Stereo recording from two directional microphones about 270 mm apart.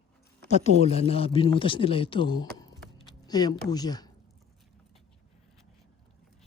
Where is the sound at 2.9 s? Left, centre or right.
Centre.